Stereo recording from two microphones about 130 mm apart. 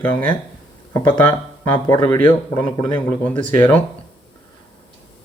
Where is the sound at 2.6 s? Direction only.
30° left (ahead or behind).